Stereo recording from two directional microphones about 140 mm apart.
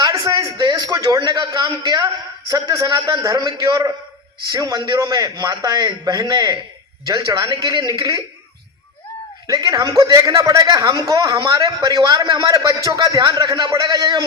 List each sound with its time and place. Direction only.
0.0 s a sound: 30° right (ahead or behind)
2.5 s a man's voice: 30° right (ahead or behind)
9.5 s a man's voice: 30° right (ahead or behind)